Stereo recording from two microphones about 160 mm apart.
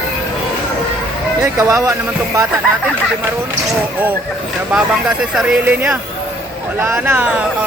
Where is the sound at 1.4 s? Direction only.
20° right (ahead or behind).